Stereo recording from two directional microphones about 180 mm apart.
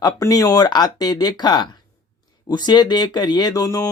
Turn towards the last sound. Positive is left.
turn(degrees=20)  # may be behind; listen again after turning